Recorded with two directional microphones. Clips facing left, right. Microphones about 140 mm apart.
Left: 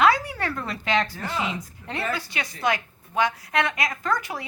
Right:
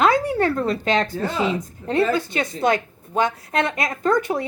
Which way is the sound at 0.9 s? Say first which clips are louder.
Right 3 dB; 50° right (ahead or behind).